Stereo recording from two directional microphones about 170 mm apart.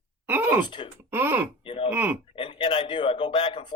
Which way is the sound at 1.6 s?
30° left (ahead or behind).